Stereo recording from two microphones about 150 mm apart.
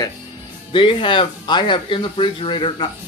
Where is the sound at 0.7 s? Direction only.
35° left (ahead or behind).